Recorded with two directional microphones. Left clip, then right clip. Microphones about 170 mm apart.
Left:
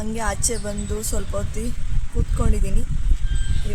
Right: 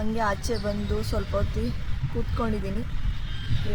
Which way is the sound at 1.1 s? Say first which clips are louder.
Even; 25° left (ahead or behind).